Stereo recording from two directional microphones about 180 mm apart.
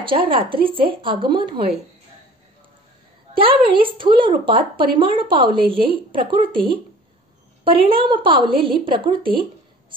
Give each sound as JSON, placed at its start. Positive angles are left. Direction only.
{"t": 0.0, "sound": "speech", "side_deg": -30}
{"t": 3.3, "sound": "speech", "side_deg": -30}